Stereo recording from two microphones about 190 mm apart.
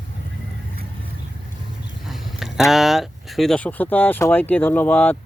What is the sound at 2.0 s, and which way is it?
Speech, centre (ahead or behind).